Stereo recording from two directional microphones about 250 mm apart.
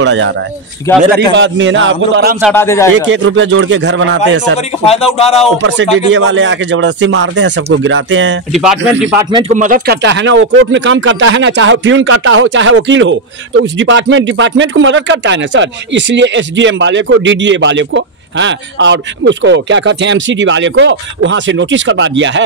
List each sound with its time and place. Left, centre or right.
0.0 s speech: right
0.9 s speech: centre
1.3 s speech: right
2.5 s speech: centre
3.1 s speech: right
4.6 s speech: left
5.6 s speech: right
8.5 s speech: centre
9.2 s speech: centre
9.5 s speech: right